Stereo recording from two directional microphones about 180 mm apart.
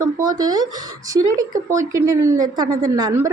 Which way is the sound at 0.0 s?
20° right (ahead or behind).